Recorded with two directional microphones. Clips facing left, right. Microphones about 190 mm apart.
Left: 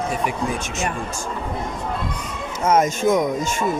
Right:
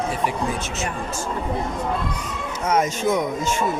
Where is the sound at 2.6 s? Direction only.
45° left (ahead or behind).